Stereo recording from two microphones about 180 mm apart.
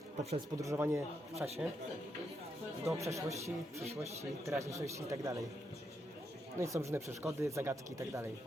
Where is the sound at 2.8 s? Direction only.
15° right (ahead or behind).